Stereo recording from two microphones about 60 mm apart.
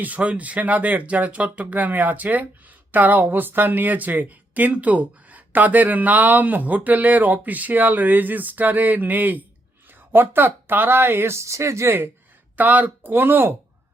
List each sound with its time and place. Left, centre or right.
0.0 s speech: right
12.5 s speech: right